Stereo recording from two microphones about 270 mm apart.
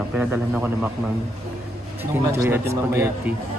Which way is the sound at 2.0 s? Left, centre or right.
Centre.